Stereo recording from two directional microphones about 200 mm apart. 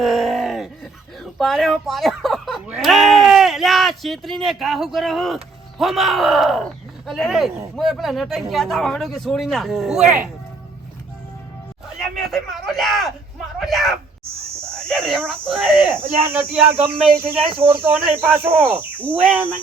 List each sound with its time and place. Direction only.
0.0 s a sound: centre (ahead or behind)
1.2 s speech: centre (ahead or behind)
12.1 s speech: centre (ahead or behind)
14.8 s cricket: 5° left (ahead or behind)
15.3 s speech: centre (ahead or behind)
17.2 s speech: 30° right (ahead or behind)
18.2 s speech: 10° right (ahead or behind)